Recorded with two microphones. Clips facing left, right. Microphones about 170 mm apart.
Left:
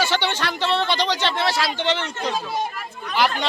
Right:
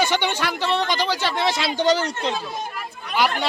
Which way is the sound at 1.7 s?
40° right (ahead or behind).